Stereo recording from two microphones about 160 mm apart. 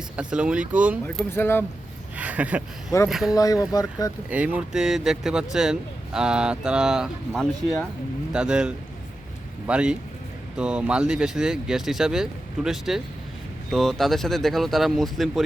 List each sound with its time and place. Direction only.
0.2 s speech: 5° right (ahead or behind)
1.0 s speech: 15° left (ahead or behind)
2.1 s a sound: 10° right (ahead or behind)
3.1 s speech: centre (ahead or behind)
3.3 s speech: 20° left (ahead or behind)
4.3 s speech: 10° right (ahead or behind)